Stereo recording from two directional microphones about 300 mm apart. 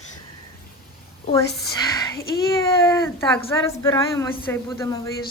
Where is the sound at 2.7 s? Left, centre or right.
Centre.